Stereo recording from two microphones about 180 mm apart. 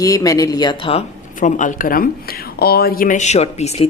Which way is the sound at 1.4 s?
45° left (ahead or behind).